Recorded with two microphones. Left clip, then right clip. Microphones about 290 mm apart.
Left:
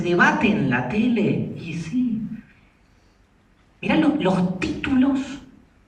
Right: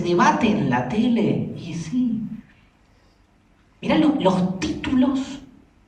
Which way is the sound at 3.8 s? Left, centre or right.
Centre.